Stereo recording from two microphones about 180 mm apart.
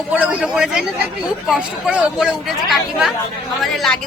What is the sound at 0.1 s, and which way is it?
Speech, 5° right (ahead or behind).